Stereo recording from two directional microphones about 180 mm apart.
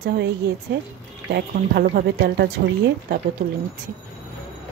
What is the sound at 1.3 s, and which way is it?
Speech, 55° right (ahead or behind).